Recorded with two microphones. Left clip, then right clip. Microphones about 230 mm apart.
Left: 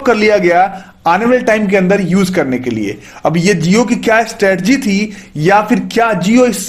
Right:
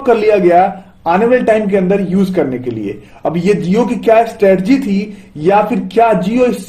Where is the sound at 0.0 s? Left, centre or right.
Left.